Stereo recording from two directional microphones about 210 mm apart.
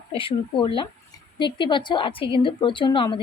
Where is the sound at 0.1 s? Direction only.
25° left (ahead or behind).